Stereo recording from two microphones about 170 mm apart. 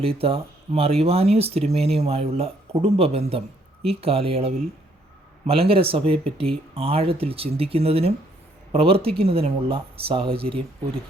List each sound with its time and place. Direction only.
0.0 s speech: 35° right (ahead or behind)